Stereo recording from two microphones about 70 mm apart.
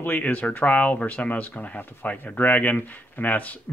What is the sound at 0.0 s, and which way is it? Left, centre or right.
Speech, left.